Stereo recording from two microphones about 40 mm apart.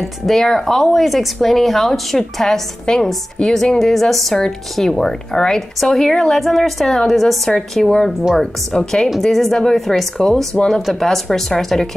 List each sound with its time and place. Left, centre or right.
0.0 s a woman's voice: centre
8.1 s speech: centre
8.7 s a woman's voice: centre
9.2 s a woman's voice: centre